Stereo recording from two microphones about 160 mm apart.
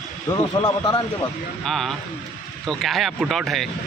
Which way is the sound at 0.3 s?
15° left (ahead or behind).